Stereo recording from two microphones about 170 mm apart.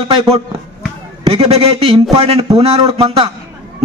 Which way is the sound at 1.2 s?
35° right (ahead or behind).